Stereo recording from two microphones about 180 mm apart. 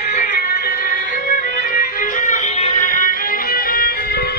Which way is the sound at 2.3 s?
40° left (ahead or behind).